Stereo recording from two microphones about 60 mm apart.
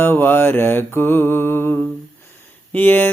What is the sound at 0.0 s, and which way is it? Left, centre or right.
Mantra, left.